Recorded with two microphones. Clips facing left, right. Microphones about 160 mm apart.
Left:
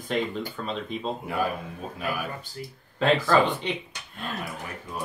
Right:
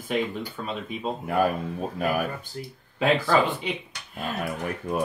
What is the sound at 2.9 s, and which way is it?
Speech, 5° right (ahead or behind).